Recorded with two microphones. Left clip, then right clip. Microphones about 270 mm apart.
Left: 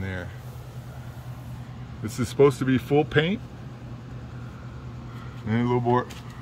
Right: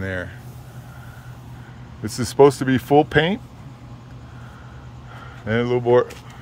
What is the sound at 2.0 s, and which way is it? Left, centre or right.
Speech, centre.